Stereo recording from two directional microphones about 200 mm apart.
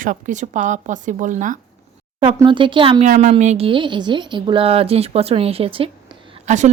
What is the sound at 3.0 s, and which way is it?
A woman's voice, 40° right (ahead or behind).